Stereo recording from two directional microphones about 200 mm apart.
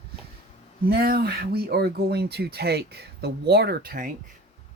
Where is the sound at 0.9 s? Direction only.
50° right (ahead or behind).